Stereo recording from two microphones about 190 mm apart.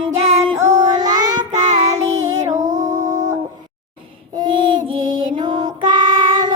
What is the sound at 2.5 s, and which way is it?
Music, 40° right (ahead or behind).